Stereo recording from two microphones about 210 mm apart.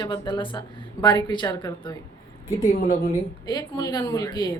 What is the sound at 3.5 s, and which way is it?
A woman's voice, 20° left (ahead or behind).